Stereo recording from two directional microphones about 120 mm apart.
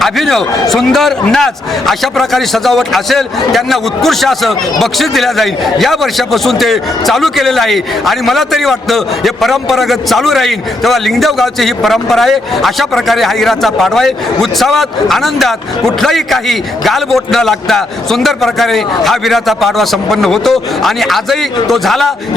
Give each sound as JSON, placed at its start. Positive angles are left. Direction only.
{"t": 0.0, "sound": "a man's voice", "side_deg": 0}